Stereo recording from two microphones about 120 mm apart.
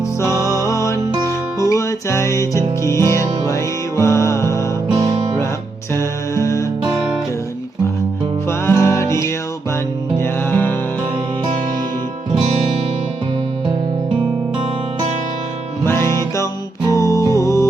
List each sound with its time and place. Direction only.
0.4 s music: 25° left (ahead or behind)
4.9 s music: 35° right (ahead or behind)
5.9 s music: 25° left (ahead or behind)
8.4 s music: 20° left (ahead or behind)
15.8 s music: 20° left (ahead or behind)